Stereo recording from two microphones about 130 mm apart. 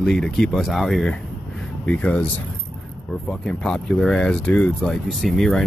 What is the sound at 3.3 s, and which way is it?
Speech, 5° left (ahead or behind).